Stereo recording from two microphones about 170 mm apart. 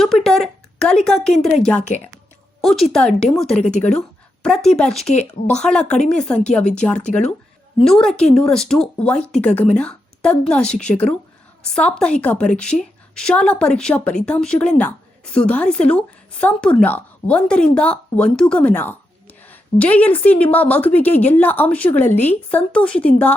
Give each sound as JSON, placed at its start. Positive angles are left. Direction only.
{"t": 0.0, "sound": "a sound", "side_deg": 0}
{"t": 2.6, "sound": "a woman's voice", "side_deg": 0}
{"t": 3.5, "sound": "speech", "side_deg": 40}
{"t": 4.4, "sound": "speech", "side_deg": 5}
{"t": 5.0, "sound": "speech", "side_deg": 40}
{"t": 5.5, "sound": "speech", "side_deg": 5}